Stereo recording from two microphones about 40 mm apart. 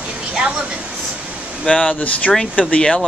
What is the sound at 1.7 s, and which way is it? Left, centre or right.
Speech, left.